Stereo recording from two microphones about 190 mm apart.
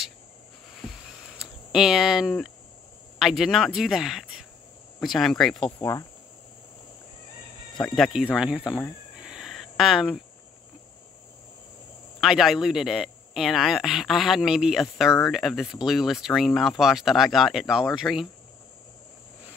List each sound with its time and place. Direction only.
0.7 s a sound: centre (ahead or behind)
3.2 s speech: centre (ahead or behind)
5.8 s cricket: 20° left (ahead or behind)
7.9 s speech: centre (ahead or behind)
9.2 s a sound: 5° right (ahead or behind)
12.2 s speech: centre (ahead or behind)